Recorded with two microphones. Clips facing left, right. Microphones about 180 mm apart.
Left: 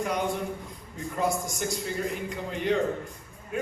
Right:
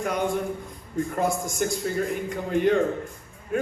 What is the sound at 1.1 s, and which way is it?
A man's voice, 50° right (ahead or behind).